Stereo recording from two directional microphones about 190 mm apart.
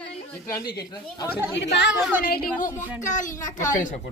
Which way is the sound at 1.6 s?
65° left (ahead or behind).